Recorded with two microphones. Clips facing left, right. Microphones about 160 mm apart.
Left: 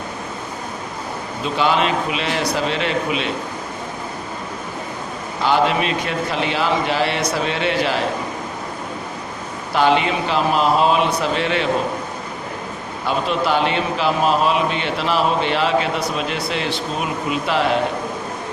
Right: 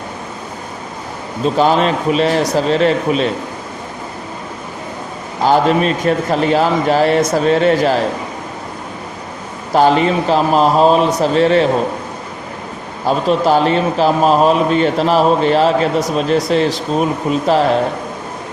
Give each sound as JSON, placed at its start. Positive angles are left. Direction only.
{"t": 1.5, "sound": "a man's voice", "side_deg": -40}
{"t": 5.4, "sound": "a man's voice", "side_deg": -40}
{"t": 9.7, "sound": "a man's voice", "side_deg": -40}
{"t": 13.1, "sound": "a man's voice", "side_deg": -40}